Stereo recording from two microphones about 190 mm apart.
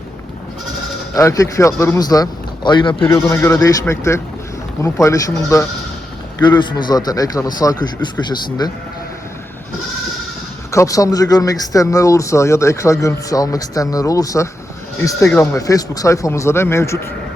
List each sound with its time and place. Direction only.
1.1 s speech: 15° left (ahead or behind)
6.6 s a man's voice: 25° left (ahead or behind)
10.7 s speech: 15° left (ahead or behind)